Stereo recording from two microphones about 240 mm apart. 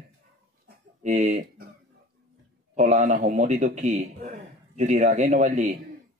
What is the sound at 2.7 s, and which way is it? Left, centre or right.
A man's voice, right.